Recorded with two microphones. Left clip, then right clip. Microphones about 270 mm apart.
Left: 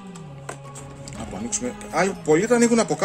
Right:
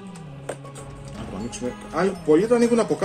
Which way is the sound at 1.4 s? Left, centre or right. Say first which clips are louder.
Left 2 dB; left.